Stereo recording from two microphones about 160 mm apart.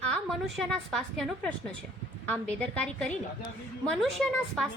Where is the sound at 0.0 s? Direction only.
5° left (ahead or behind).